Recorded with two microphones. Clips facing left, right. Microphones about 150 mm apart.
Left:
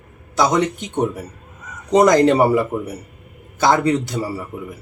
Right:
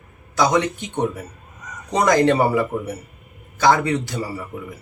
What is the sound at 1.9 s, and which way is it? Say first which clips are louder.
Speech: left 4 dB; 20° left (ahead or behind).